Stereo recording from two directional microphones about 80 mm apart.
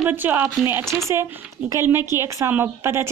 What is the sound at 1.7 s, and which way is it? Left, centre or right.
A woman's voice, right.